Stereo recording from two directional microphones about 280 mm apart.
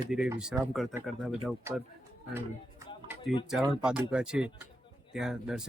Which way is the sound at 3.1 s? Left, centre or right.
Centre.